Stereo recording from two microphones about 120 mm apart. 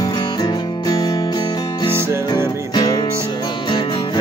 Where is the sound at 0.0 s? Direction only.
35° left (ahead or behind).